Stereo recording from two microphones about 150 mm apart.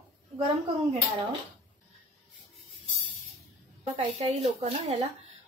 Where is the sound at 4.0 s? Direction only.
45° right (ahead or behind).